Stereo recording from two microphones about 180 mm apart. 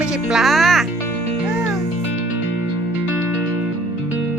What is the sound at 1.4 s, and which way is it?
Music, 5° right (ahead or behind).